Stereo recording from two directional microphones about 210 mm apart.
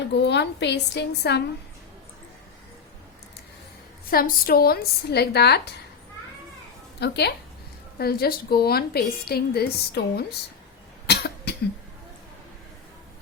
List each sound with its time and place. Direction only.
0.1 s a woman's voice: 55° left (ahead or behind)
4.1 s a woman's voice: 45° left (ahead or behind)
7.0 s a woman's voice: 50° left (ahead or behind)
11.0 s cough: 50° left (ahead or behind)